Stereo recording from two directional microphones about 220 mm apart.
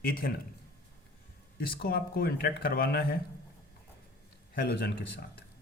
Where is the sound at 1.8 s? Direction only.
45° left (ahead or behind).